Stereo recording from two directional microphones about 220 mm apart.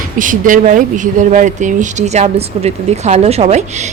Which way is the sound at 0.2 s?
35° right (ahead or behind).